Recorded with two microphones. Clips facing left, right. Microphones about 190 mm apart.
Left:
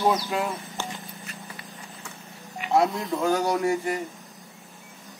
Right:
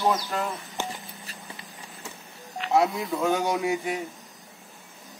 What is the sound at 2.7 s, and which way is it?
A man's voice, centre (ahead or behind).